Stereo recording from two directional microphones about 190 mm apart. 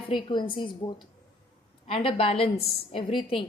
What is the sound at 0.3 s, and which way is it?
A woman's voice, 25° left (ahead or behind).